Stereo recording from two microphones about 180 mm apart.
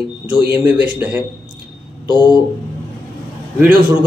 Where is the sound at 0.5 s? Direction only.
10° right (ahead or behind).